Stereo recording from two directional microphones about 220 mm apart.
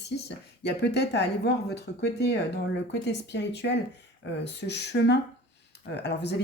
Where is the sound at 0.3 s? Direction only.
50° left (ahead or behind).